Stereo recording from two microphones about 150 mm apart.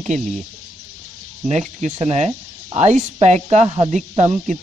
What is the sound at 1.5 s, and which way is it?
Speech, 50° right (ahead or behind).